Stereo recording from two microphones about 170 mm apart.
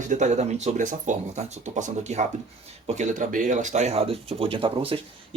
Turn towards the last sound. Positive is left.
turn(degrees=-30)  # may be behind; listen again after turning